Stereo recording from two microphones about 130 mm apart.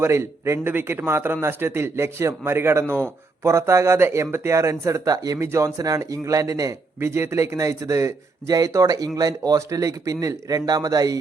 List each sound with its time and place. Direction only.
0.0 s speech: 20° right (ahead or behind)